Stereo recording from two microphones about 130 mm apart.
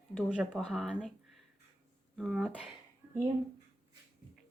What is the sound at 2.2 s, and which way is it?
Speech, centre (ahead or behind).